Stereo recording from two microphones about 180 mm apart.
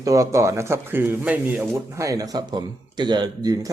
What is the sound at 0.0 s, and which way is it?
Speech, 15° right (ahead or behind).